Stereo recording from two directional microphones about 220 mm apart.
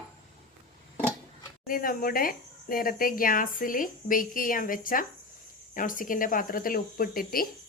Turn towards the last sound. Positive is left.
turn(degrees=40)  # may be behind; listen again after turning